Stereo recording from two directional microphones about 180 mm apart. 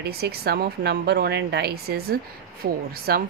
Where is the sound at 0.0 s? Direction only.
60° right (ahead or behind).